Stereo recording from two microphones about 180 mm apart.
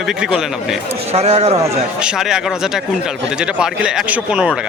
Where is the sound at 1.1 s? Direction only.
35° right (ahead or behind).